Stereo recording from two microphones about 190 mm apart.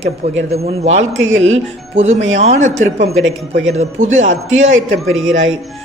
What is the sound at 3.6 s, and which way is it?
Speech, 35° right (ahead or behind).